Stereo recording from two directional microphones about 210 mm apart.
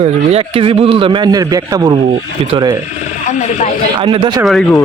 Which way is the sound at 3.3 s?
35° left (ahead or behind).